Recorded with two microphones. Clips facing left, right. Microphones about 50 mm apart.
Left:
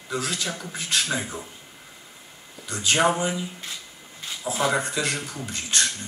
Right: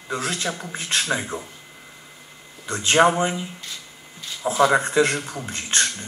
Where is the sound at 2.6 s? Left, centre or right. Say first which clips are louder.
Right 5 dB; right.